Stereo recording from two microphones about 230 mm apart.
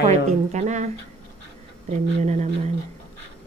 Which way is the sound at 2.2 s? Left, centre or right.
Right.